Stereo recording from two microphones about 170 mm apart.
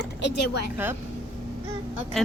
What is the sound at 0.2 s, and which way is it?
Speech, 80° left.